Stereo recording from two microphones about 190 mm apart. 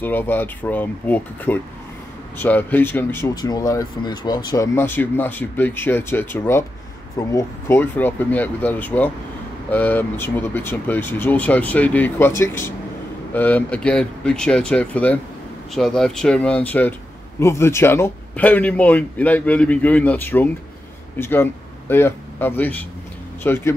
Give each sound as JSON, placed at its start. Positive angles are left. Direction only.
{"t": 0.0, "sound": "a man's voice", "side_deg": 10}